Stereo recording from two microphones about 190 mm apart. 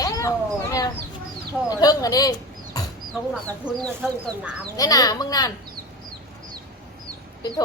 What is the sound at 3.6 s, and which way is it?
Speech, centre (ahead or behind).